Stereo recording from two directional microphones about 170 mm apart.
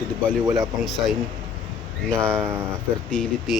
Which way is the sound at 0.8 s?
Centre (ahead or behind).